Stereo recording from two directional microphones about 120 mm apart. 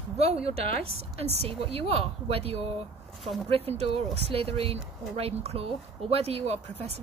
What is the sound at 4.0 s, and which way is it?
Speech, 55° right (ahead or behind).